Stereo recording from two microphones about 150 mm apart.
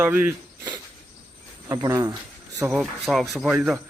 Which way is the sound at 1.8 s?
25° right (ahead or behind).